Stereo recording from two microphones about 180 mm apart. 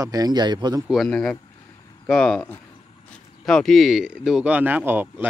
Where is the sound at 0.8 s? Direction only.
Centre (ahead or behind).